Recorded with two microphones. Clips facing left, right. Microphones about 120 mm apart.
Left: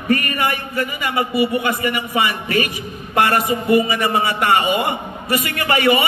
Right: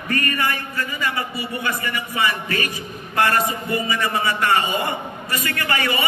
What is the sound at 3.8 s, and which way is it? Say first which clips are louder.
A man's voice: left 3 dB; 20° left (ahead or behind).